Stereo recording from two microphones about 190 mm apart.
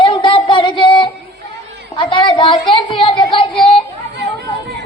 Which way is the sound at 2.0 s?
25° left (ahead or behind).